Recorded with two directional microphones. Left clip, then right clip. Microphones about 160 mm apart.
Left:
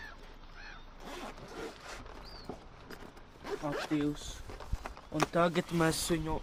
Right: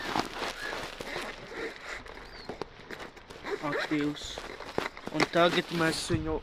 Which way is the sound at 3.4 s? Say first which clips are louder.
Right 5 dB; 15° left (ahead or behind).